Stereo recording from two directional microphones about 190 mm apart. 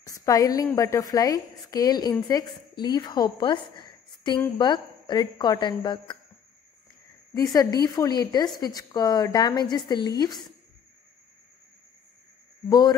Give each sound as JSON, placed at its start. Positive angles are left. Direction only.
{"t": 0.0, "sound": "a woman's voice", "side_deg": 20}
{"t": 7.3, "sound": "a woman's voice", "side_deg": 20}
{"t": 12.6, "sound": "a woman's voice", "side_deg": 20}